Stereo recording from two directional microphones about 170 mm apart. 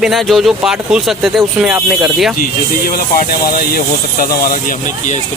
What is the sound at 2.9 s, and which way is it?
Speech, 55° left (ahead or behind).